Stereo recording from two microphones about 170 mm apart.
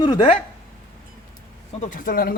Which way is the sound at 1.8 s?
50° left (ahead or behind).